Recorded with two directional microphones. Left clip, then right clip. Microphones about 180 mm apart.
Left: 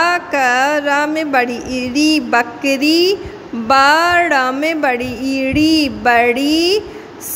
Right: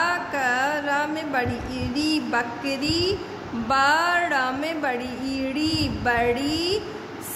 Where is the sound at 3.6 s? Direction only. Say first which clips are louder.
Left 9 dB; 40° left (ahead or behind).